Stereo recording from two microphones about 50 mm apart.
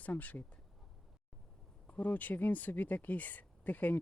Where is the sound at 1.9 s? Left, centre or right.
Left.